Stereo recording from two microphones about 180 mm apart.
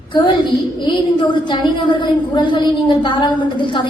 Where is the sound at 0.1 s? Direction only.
25° left (ahead or behind).